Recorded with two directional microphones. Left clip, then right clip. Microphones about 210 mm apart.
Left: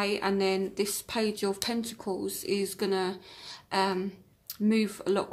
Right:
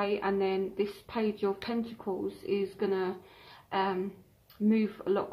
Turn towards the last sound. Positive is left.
turn(degrees=35)  # may be behind; listen again after turning